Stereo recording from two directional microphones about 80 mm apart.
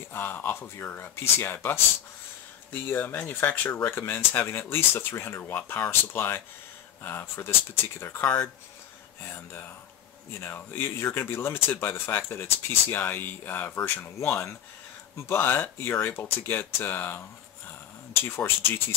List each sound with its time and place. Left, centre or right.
0.1 s speech: left
8.2 s speech: centre
9.2 s speech: left